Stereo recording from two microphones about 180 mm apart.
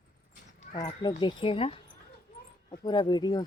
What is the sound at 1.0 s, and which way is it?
A woman's voice, 25° left (ahead or behind).